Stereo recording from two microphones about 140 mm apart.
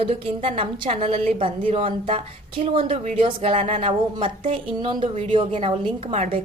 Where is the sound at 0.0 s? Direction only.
40° right (ahead or behind).